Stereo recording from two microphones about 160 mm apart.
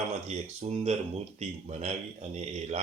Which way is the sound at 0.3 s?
40° right (ahead or behind).